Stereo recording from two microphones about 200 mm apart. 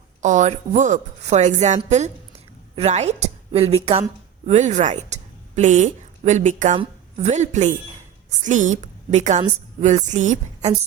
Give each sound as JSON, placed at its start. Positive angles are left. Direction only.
{"t": 0.2, "sound": "a woman's voice", "side_deg": -35}